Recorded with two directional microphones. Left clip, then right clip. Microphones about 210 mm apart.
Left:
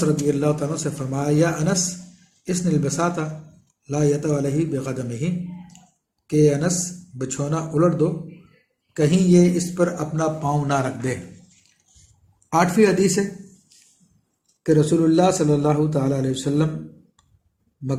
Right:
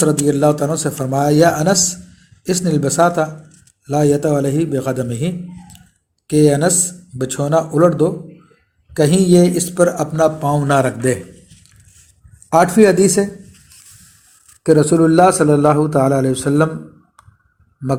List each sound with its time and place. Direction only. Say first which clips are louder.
0.3 s speech: right 7 dB; 35° right (ahead or behind)
12.5 s a man's voice: right 7 dB; 25° right (ahead or behind)
14.6 s a man's voice: right 6 dB; 20° right (ahead or behind)